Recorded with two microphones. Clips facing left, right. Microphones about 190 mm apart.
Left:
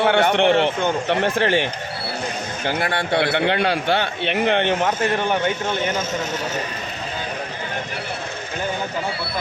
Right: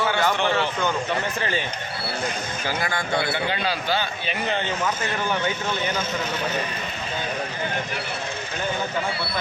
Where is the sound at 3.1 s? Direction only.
65° left (ahead or behind).